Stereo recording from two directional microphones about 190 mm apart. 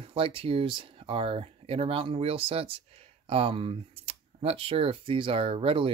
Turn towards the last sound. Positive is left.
turn(degrees=-30)  # may be behind; listen again after turning